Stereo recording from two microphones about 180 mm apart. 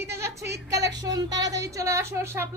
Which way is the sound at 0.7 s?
20° right (ahead or behind).